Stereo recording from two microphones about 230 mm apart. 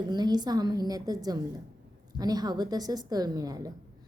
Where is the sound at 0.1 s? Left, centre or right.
Centre.